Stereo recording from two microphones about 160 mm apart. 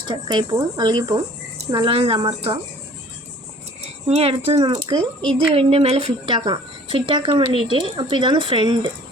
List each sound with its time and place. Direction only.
0.1 s speech: 30° right (ahead or behind)
4.0 s speech: 40° right (ahead or behind)
4.5 s speech: 25° right (ahead or behind)
5.5 s speech: 40° right (ahead or behind)